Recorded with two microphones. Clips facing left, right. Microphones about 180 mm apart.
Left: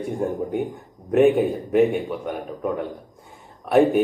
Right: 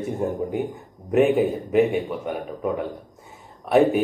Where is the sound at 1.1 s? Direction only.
Centre (ahead or behind).